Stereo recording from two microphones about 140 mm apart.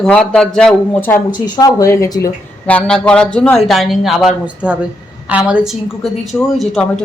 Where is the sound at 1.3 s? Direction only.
30° left (ahead or behind).